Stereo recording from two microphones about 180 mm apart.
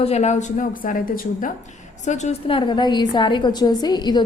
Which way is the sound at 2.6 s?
25° left (ahead or behind).